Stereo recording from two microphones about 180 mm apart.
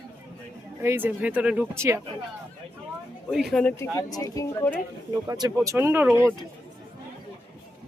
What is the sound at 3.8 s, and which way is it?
Speech, 20° left (ahead or behind).